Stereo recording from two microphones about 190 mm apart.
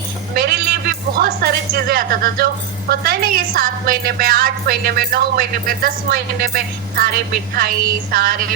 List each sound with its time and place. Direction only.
0.3 s a woman's voice: 55° right (ahead or behind)